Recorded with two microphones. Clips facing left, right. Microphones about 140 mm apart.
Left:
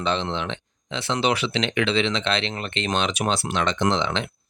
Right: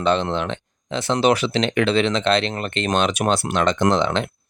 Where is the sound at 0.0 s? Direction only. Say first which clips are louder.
Right 5 dB; 50° right (ahead or behind).